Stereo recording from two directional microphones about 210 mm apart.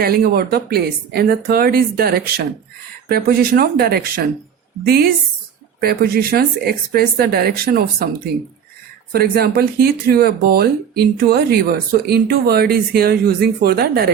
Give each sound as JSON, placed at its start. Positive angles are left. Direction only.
{"t": 0.0, "sound": "speech", "side_deg": -45}
{"t": 9.1, "sound": "speech", "side_deg": -45}